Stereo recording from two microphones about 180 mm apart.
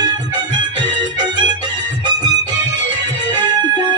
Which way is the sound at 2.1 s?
25° right (ahead or behind).